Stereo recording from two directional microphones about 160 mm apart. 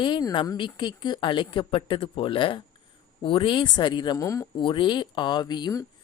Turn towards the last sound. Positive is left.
turn(degrees=25)  # may be behind; listen again after turning